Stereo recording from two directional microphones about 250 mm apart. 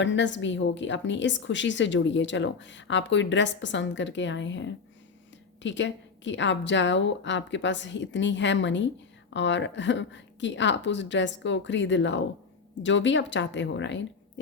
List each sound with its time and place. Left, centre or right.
0.0 s a woman's voice: left